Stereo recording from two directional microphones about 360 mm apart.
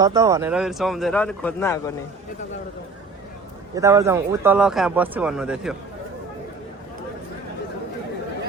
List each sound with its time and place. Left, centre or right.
0.0 s speech: centre
3.8 s speech: centre